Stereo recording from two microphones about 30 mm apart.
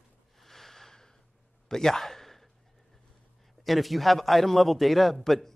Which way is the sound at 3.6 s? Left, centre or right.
Centre.